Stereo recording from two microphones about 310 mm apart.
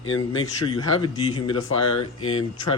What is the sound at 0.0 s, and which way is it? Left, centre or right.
Speech, centre.